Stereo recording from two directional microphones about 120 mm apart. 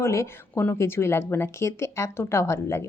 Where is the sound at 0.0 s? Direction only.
20° left (ahead or behind).